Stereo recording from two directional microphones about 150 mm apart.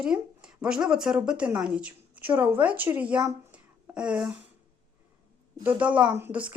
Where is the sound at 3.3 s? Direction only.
10° right (ahead or behind).